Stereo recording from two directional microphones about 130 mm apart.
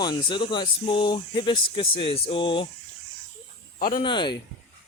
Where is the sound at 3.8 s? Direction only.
90° left.